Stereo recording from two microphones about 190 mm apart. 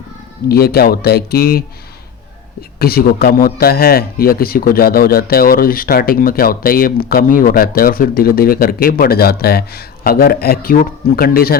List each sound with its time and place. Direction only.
0.4 s speech: 55° left (ahead or behind)